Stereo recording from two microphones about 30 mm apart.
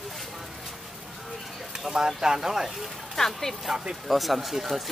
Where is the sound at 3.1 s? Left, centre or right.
Centre.